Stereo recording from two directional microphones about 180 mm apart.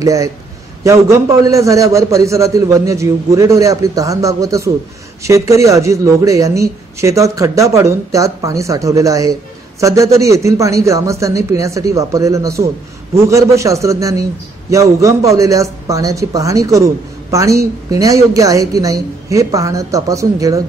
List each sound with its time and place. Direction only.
0.0 s a man's voice: 20° right (ahead or behind)